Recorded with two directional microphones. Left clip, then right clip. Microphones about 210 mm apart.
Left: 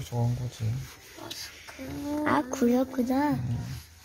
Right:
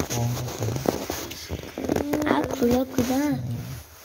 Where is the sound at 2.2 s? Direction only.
35° left (ahead or behind).